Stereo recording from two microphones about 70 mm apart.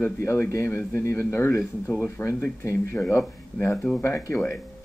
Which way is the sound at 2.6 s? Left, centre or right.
Left.